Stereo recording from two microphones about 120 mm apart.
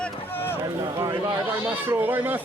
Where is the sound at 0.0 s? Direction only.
15° left (ahead or behind).